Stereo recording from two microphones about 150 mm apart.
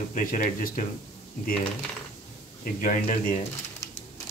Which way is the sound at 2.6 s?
60° left (ahead or behind).